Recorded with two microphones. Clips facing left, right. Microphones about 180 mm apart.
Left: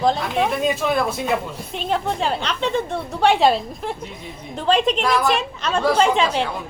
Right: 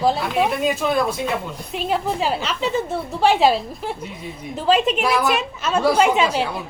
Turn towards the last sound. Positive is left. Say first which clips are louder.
# right 1 dB
turn(degrees=-5)  # may be behind; listen again after turning